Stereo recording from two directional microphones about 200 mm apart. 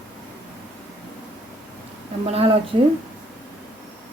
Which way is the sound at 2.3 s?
30° right (ahead or behind).